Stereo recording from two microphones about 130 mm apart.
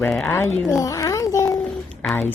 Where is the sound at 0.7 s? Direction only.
25° left (ahead or behind).